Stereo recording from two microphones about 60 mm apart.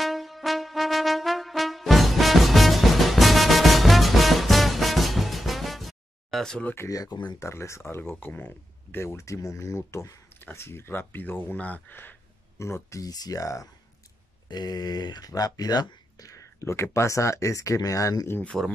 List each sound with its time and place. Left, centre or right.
0.0 s brass instrument: centre
6.9 s speech: left
7.4 s speech: left
8.1 s speech: left
9.0 s speech: left
10.5 s speech: left
12.5 s speech: left
13.0 s speech: left
14.8 s speech: left
16.5 s speech: left
18.5 s speech: centre